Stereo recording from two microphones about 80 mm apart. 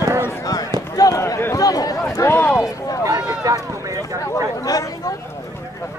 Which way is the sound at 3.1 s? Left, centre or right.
Right.